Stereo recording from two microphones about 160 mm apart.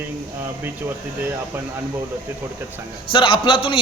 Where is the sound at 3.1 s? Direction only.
30° left (ahead or behind).